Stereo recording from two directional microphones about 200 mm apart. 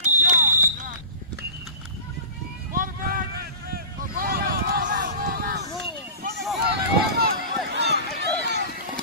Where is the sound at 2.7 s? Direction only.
45° right (ahead or behind).